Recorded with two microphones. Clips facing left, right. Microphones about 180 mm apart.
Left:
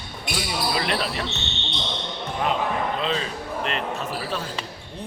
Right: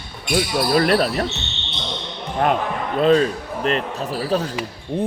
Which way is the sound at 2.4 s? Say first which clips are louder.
Right 4 dB; 55° right (ahead or behind).